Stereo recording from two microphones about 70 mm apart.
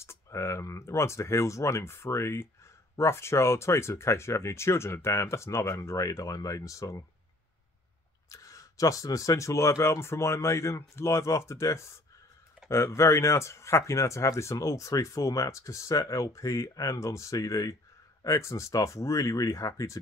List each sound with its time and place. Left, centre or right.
0.0 s speech: left
8.3 s speech: left